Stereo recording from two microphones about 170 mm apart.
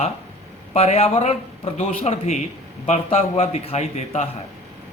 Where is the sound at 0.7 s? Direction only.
40° left (ahead or behind).